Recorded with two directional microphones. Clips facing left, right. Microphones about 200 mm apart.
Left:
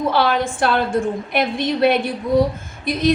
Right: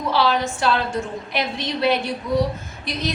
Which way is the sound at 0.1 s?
55° left (ahead or behind).